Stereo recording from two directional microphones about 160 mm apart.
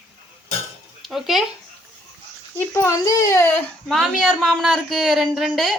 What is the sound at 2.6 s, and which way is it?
Speech, 15° left (ahead or behind).